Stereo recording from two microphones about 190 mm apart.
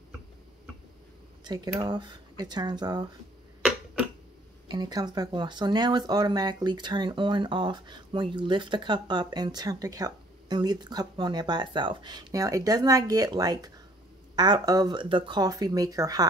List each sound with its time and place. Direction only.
1.4 s speech: 20° right (ahead or behind)
4.6 s speech: 20° right (ahead or behind)